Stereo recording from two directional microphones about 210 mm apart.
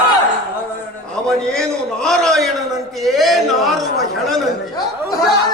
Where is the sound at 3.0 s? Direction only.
Centre (ahead or behind).